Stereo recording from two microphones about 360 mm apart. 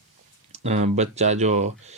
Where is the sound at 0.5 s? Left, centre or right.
Centre.